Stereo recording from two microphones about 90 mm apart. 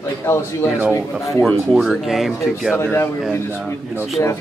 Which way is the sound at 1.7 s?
Centre (ahead or behind).